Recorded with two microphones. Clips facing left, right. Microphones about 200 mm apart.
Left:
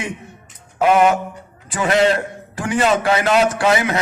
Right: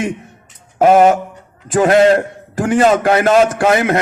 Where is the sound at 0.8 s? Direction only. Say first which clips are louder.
Right 5 dB; 45° right (ahead or behind).